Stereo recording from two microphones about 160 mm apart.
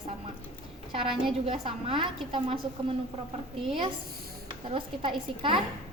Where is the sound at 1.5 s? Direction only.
35° right (ahead or behind).